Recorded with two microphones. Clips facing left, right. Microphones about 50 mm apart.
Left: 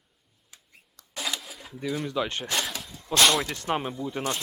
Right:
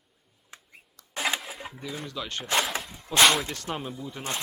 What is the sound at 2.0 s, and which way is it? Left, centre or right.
Speech, left.